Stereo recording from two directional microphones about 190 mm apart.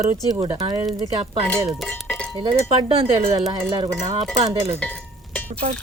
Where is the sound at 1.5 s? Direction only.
5° left (ahead or behind).